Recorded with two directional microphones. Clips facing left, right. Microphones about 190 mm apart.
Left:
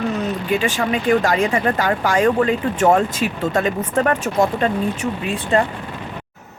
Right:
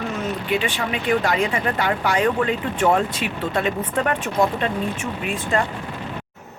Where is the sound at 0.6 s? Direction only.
45° left (ahead or behind).